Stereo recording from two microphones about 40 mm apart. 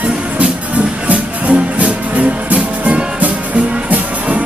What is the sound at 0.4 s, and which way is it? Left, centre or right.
Music, right.